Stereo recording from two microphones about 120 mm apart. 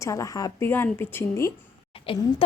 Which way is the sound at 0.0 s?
25° left (ahead or behind).